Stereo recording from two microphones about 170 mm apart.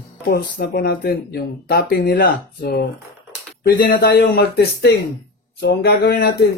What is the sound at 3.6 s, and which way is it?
Speech, 55° left (ahead or behind).